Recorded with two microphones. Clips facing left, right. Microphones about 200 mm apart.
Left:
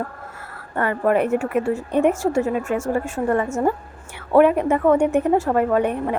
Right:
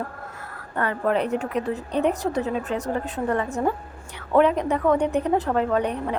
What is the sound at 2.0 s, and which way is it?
Speech, 45° left (ahead or behind).